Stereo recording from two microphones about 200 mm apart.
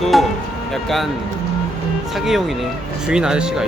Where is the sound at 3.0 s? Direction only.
5° right (ahead or behind).